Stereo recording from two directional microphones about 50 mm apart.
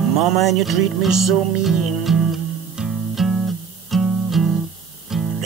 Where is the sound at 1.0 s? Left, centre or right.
Centre.